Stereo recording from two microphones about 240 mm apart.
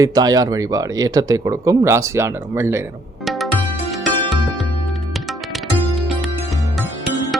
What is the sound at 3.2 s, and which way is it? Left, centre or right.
Music, centre.